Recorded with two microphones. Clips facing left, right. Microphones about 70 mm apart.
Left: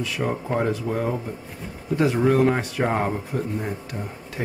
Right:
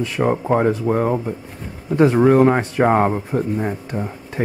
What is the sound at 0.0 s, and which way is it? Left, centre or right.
Speech, right.